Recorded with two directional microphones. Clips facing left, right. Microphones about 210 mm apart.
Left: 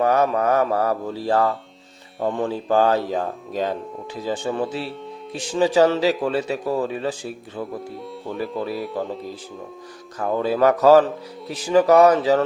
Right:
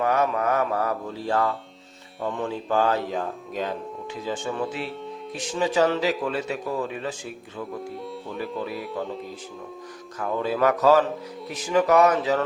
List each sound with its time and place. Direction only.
0.0 s speech: 35° left (ahead or behind)
8.7 s speech: centre (ahead or behind)
10.2 s speech: 30° left (ahead or behind)